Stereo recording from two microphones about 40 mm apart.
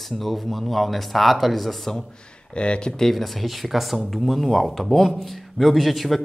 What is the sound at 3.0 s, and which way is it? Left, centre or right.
A man's voice, centre.